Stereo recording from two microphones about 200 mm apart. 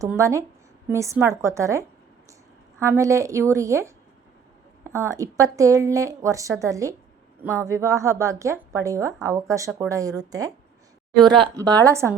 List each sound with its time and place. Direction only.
0.0 s speech: 15° right (ahead or behind)
2.8 s speech: 15° right (ahead or behind)